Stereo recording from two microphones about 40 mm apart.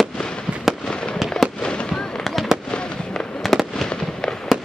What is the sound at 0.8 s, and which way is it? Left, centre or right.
Fireworks, left.